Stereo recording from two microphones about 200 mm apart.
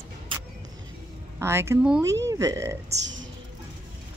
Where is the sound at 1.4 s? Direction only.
15° right (ahead or behind).